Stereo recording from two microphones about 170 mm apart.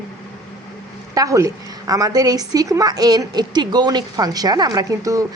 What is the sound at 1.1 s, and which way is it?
Speech, 20° right (ahead or behind).